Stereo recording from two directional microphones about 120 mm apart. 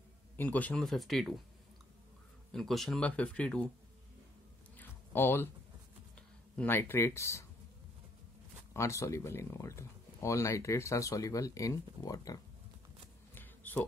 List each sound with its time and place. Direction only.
0.4 s speech: 15° left (ahead or behind)
0.8 s speech: centre (ahead or behind)
2.5 s speech: centre (ahead or behind)
4.7 s a sound: 20° left (ahead or behind)
6.1 s speech: 10° left (ahead or behind)
8.7 s speech: 25° left (ahead or behind)
13.3 s a sound: 15° left (ahead or behind)